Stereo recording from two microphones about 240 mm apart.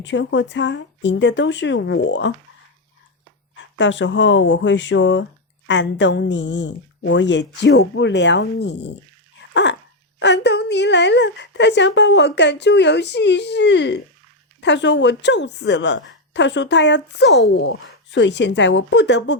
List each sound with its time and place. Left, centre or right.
0.0 s a woman's voice: left
3.8 s a woman's voice: left
9.5 s dog: left
10.2 s a woman's voice: left